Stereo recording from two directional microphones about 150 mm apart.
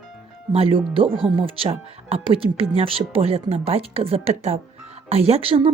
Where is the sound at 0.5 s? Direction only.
40° right (ahead or behind).